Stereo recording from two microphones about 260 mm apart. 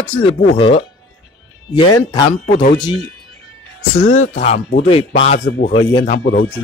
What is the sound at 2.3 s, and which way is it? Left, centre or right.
Speech, left.